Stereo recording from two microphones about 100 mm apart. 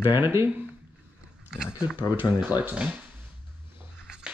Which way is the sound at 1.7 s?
15° right (ahead or behind).